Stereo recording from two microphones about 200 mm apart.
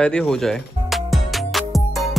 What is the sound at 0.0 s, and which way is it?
Music, 5° left (ahead or behind).